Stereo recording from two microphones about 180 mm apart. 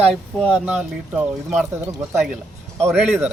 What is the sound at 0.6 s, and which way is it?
Speech, 10° right (ahead or behind).